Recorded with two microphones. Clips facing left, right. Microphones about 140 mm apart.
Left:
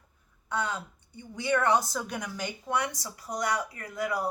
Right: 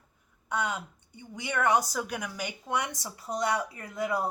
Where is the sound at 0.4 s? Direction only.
15° right (ahead or behind).